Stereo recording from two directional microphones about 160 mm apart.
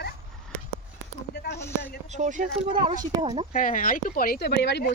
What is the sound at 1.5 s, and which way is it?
Speech, 15° left (ahead or behind).